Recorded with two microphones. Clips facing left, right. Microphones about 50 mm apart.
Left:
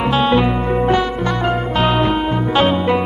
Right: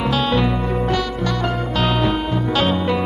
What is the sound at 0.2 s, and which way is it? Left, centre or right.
Music, left.